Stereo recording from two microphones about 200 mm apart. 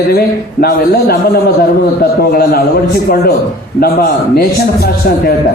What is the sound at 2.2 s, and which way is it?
Speech, 50° left (ahead or behind).